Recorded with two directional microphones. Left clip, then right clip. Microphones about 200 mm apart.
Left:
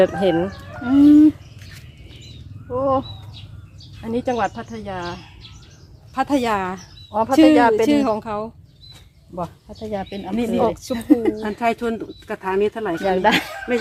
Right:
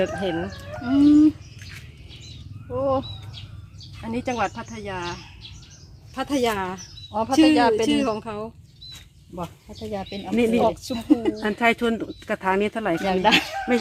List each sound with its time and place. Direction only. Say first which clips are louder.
0.0 s speech: left 8 dB; 50° left (ahead or behind)
0.9 s speech: left 4 dB; 10° left (ahead or behind)
2.6 s speech: left 4 dB; 5° left (ahead or behind)
4.1 s speech: left 4 dB; 30° left (ahead or behind)
7.1 s speech: left 5 dB; 5° left (ahead or behind)
7.9 s speech: left 5 dB; 40° left (ahead or behind)
9.3 s speech: left 5 dB; 5° left (ahead or behind)
10.7 s speech: left 1 dB; 30° left (ahead or behind)
10.9 s speech: left 4 dB; 5° left (ahead or behind)
11.7 s speech: even; 30° right (ahead or behind)
13.1 s speech: left 2 dB; 5° left (ahead or behind)
13.7 s speech: left 1 dB; 45° right (ahead or behind)